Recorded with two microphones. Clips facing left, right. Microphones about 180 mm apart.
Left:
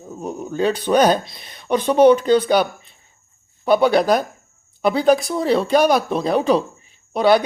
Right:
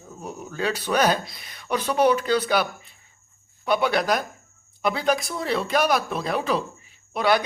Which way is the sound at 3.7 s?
35° left (ahead or behind).